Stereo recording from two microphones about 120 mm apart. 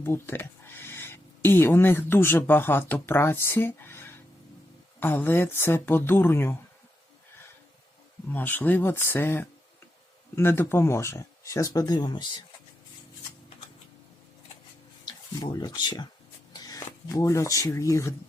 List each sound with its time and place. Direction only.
0.0 s speech: 20° left (ahead or behind)
8.3 s speech: 15° left (ahead or behind); by 12.4 s 40° left (ahead or behind)
15.0 s speech: 35° left (ahead or behind)